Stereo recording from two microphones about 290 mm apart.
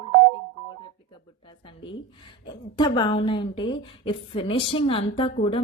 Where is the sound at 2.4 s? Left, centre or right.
Centre.